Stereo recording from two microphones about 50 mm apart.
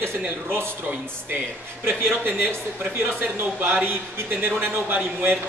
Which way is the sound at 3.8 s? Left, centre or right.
Right.